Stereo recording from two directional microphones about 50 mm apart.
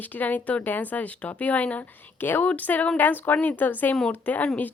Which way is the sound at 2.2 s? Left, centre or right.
Left.